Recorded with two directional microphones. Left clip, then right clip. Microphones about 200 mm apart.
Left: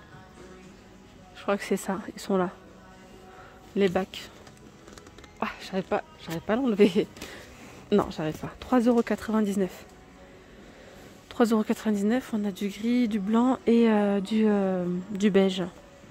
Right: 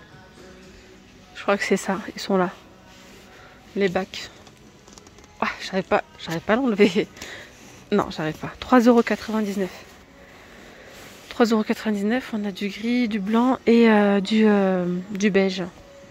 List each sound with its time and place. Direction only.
1.3 s speech: centre (ahead or behind)
3.7 s speech: 5° left (ahead or behind)
5.4 s speech: centre (ahead or behind)
11.2 s speech: 5° left (ahead or behind)
15.1 s speech: 10° left (ahead or behind)